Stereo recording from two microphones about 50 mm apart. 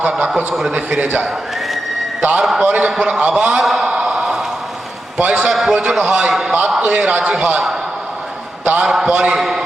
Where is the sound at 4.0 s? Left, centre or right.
Centre.